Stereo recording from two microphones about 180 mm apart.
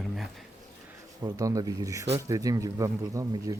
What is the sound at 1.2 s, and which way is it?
Speech, 20° right (ahead or behind).